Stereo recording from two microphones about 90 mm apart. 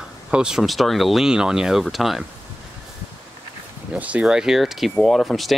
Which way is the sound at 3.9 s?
15° right (ahead or behind).